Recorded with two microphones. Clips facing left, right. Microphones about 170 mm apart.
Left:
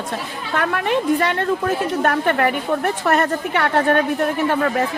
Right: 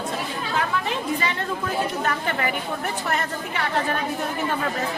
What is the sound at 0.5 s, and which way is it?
A woman's voice, 65° left (ahead or behind).